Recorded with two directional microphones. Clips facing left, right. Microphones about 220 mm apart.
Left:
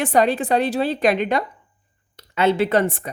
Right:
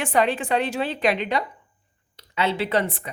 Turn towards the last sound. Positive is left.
turn(degrees=45)  # may be behind; listen again after turning